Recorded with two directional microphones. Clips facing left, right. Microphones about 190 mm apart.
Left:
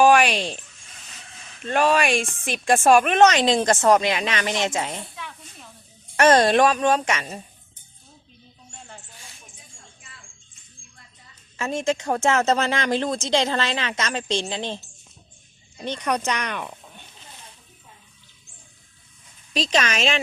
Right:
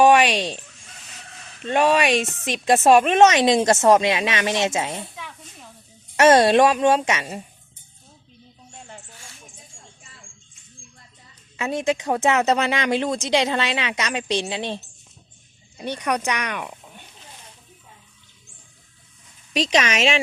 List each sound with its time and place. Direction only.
1.6 s speech: 25° right (ahead or behind)
11.5 s speech: 15° right (ahead or behind)
15.8 s speech: 10° right (ahead or behind)
19.5 s speech: 20° right (ahead or behind)